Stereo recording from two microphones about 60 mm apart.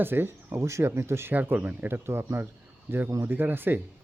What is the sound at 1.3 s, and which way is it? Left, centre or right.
Speech, right.